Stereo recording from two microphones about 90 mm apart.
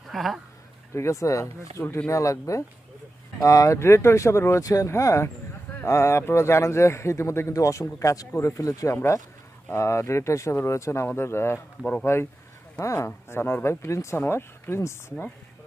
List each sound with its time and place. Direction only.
0.1 s speech: centre (ahead or behind)
0.9 s a man's voice: 35° left (ahead or behind)
11.8 s speech: 10° left (ahead or behind)
12.0 s a man's voice: 30° left (ahead or behind)